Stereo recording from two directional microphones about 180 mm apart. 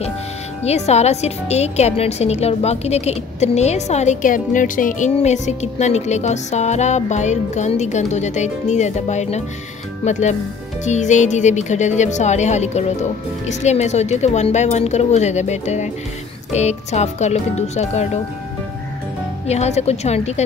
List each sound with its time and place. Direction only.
0.7 s a woman's voice: 35° left (ahead or behind)
19.4 s a woman's voice: 35° left (ahead or behind)